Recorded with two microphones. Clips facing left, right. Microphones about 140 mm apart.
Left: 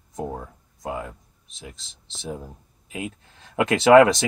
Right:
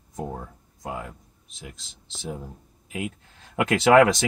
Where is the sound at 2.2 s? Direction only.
20° left (ahead or behind).